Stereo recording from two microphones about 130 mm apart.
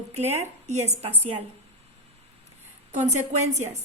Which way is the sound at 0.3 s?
60° right (ahead or behind).